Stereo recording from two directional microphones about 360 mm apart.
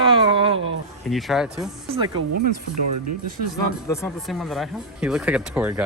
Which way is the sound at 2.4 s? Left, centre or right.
Right.